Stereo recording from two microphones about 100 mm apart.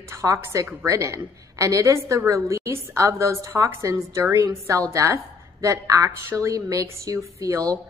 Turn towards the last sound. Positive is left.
turn(degrees=-30)  # may be behind; listen again after turning